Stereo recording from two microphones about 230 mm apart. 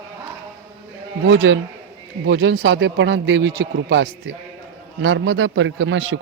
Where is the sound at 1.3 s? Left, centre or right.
Right.